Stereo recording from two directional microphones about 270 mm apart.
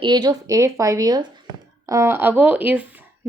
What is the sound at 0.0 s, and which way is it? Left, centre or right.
Speech, centre.